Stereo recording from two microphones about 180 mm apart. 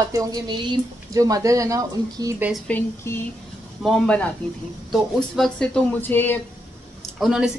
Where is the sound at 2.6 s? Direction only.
10° left (ahead or behind).